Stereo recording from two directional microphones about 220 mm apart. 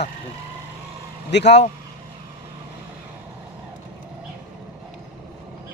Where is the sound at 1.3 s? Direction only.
50° left (ahead or behind).